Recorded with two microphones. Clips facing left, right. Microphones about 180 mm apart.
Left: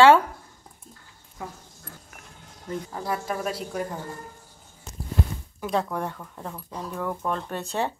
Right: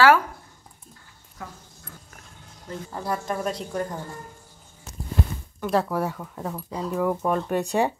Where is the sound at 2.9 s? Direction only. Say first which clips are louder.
Right 3 dB; 5° left (ahead or behind).